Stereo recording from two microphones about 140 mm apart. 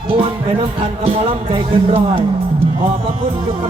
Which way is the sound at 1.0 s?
45° right (ahead or behind).